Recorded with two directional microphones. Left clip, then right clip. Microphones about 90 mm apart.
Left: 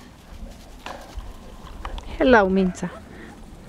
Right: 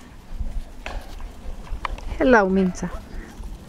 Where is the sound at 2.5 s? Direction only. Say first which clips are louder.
Even; 25° right (ahead or behind).